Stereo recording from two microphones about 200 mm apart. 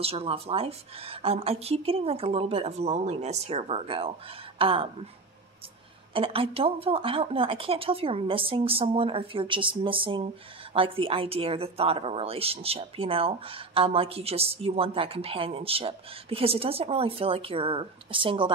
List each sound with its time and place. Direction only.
0.0 s a woman's voice: 30° right (ahead or behind)
6.1 s a woman's voice: 25° right (ahead or behind)